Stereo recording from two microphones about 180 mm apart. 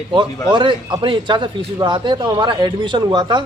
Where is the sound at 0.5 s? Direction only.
25° right (ahead or behind).